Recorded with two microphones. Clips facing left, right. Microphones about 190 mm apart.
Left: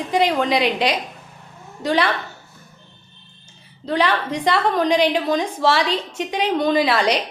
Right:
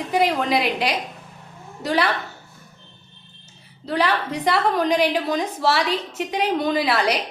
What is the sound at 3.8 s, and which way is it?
A woman's voice, 5° right (ahead or behind).